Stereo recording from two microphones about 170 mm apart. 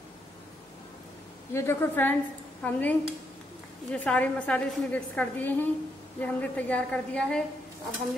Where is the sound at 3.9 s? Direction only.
10° left (ahead or behind).